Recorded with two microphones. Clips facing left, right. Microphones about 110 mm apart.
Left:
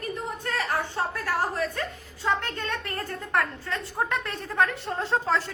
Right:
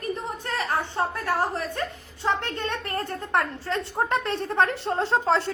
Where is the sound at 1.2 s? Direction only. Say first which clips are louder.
Right 1 dB; 25° right (ahead or behind).